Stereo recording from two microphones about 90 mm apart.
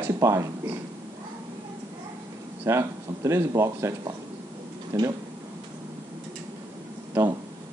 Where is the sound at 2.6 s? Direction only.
30° right (ahead or behind).